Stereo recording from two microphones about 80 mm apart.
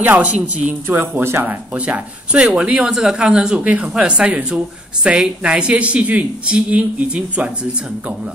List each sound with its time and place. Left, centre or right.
0.0 s speech: centre
0.8 s speech: right